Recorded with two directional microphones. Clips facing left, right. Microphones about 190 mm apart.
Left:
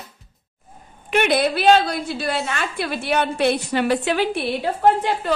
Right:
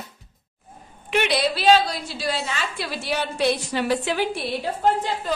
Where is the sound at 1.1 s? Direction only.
50° left (ahead or behind).